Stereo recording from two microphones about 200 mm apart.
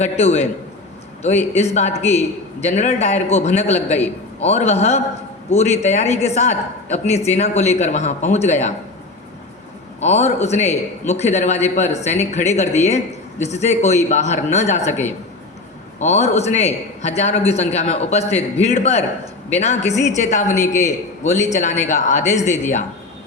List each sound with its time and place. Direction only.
0.0 s a man's voice: 35° left (ahead or behind)
10.0 s a man's voice: 35° left (ahead or behind)
16.0 s a man's voice: 35° left (ahead or behind)